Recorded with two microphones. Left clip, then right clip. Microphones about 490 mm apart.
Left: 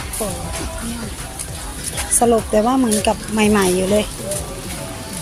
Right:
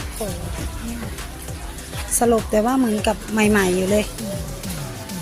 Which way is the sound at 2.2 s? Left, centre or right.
Right.